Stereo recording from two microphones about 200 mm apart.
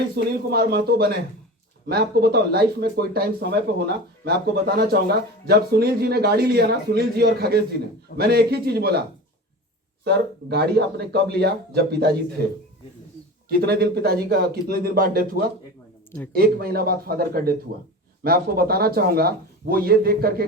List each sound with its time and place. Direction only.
0.2 s speech: 55° right (ahead or behind)
10.0 s speech: 55° right (ahead or behind)